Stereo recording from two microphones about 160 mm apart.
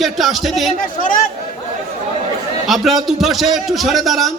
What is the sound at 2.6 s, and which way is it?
A man's voice, centre (ahead or behind).